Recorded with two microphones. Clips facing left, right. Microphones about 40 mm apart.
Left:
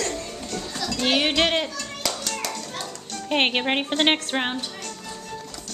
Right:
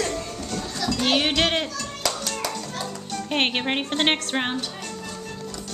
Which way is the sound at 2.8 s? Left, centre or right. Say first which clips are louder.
Right 3 dB; centre.